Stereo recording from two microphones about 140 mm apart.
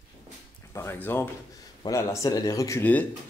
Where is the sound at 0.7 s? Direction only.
20° left (ahead or behind).